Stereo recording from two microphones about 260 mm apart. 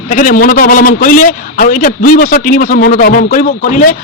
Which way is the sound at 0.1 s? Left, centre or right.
Left.